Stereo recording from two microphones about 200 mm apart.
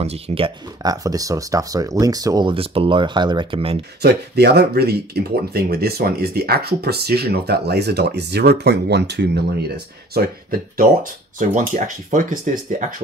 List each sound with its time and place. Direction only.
0.0 s speech: 30° right (ahead or behind)
1.0 s speech: 15° right (ahead or behind)
4.0 s speech: 55° right (ahead or behind)
10.8 s speech: 40° right (ahead or behind)